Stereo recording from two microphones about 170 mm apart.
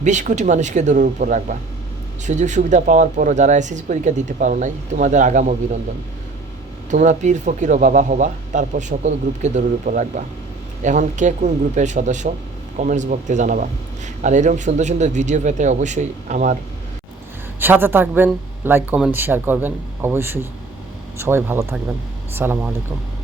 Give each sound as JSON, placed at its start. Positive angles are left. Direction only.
{"t": 0.0, "sound": "a man's voice", "side_deg": -45}
{"t": 6.9, "sound": "a man's voice", "side_deg": -45}
{"t": 17.6, "sound": "speech", "side_deg": -10}